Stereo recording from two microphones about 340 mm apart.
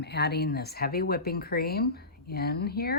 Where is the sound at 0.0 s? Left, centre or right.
Left.